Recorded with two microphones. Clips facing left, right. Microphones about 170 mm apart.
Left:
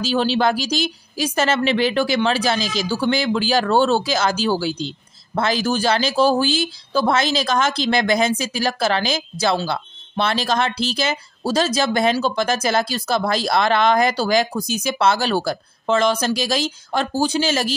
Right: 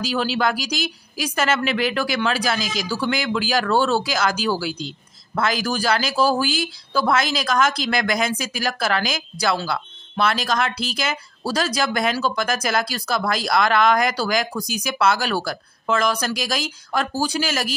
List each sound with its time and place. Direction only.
0.0 s speech: 25° left (ahead or behind)